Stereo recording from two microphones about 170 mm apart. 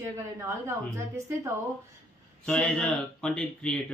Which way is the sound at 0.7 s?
15° right (ahead or behind).